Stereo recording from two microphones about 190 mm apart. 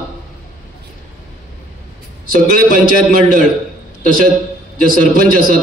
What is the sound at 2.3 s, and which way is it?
A man's voice, 45° left (ahead or behind).